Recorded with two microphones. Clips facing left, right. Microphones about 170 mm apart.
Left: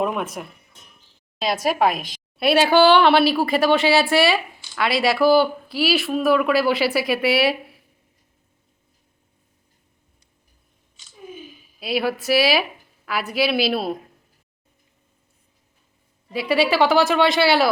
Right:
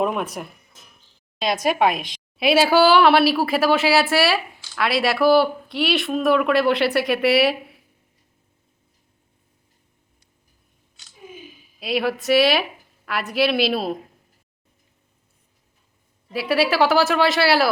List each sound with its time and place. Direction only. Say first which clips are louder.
0.0 s speech: right 1 dB; centre (ahead or behind)
1.4 s speech: even; 5° left (ahead or behind)
11.8 s speech: even; centre (ahead or behind)
16.3 s speech: left 1 dB; 5° right (ahead or behind)